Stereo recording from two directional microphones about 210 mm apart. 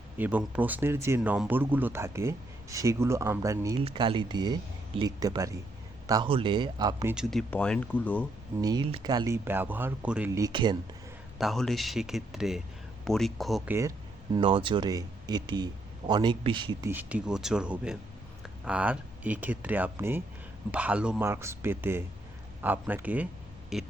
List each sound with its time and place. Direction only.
0.2 s speech: 5° right (ahead or behind)
7.1 s speech: centre (ahead or behind)
8.6 s speech: 25° right (ahead or behind)
11.3 s speech: centre (ahead or behind)
14.3 s speech: 25° right (ahead or behind)
16.9 s speech: 5° right (ahead or behind)